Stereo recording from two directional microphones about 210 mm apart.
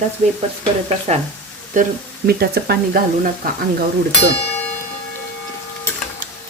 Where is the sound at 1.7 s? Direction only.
45° right (ahead or behind).